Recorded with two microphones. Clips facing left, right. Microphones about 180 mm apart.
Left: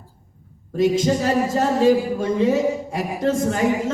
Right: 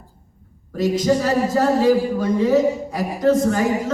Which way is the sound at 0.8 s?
25° left (ahead or behind).